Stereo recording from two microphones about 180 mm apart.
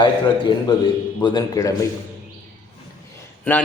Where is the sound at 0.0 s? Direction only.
25° left (ahead or behind).